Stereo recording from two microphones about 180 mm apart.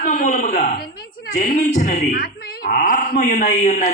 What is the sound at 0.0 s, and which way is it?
Speech, 50° left (ahead or behind).